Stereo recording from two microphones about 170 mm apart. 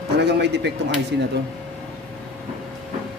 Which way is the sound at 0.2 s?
80° right.